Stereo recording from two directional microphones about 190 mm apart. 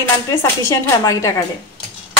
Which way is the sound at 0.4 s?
15° left (ahead or behind).